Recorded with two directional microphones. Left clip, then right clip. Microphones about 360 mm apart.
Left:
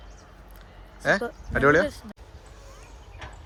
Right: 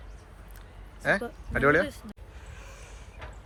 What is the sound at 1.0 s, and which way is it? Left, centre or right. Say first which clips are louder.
Speech: left 3 dB; centre.